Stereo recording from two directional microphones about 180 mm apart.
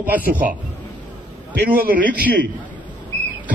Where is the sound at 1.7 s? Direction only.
50° right (ahead or behind).